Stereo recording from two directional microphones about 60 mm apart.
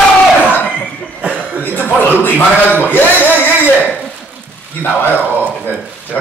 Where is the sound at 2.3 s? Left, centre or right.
Right.